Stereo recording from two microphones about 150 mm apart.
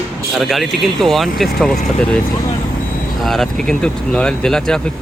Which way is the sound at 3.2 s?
Centre (ahead or behind).